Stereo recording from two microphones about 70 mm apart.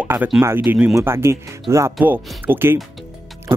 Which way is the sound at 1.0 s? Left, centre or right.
Right.